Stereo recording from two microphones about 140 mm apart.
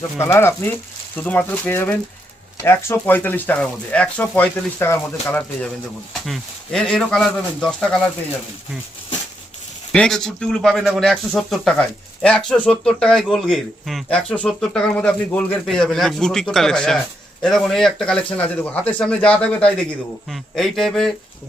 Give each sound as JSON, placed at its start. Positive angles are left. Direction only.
{"t": 0.2, "sound": "speech", "side_deg": 15}
{"t": 6.2, "sound": "speech", "side_deg": 5}
{"t": 9.9, "sound": "speech", "side_deg": 5}